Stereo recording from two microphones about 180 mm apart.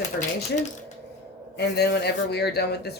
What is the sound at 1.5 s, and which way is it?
Speech, 65° left (ahead or behind).